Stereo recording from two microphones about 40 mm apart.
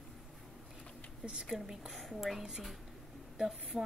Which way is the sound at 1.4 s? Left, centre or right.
Centre.